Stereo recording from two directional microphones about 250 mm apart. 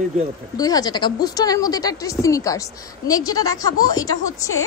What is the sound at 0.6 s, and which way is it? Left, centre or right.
Speech, centre.